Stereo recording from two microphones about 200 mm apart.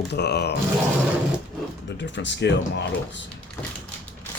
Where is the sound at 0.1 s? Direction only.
55° left (ahead or behind).